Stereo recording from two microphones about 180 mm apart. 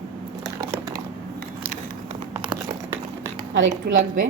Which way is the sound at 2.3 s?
25° right (ahead or behind).